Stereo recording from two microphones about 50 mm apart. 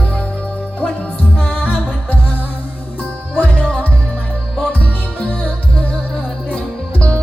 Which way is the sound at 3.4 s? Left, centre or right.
Left.